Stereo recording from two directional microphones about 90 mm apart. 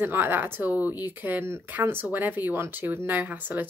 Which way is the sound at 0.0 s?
20° right (ahead or behind).